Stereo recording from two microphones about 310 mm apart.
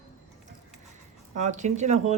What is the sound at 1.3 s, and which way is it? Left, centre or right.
Speech, right.